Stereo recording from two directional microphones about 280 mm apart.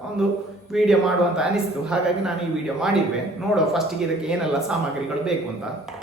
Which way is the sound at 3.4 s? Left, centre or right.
Centre.